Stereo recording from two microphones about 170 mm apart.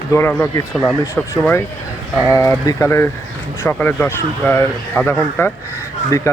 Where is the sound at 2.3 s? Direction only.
15° left (ahead or behind).